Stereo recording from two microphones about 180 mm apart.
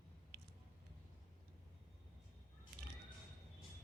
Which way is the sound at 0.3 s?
65° right (ahead or behind).